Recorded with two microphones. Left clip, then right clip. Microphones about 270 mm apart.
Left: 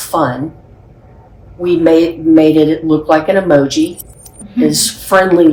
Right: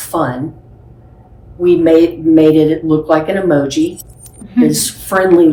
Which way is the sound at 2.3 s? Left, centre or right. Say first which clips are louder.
Left 1 dB; left.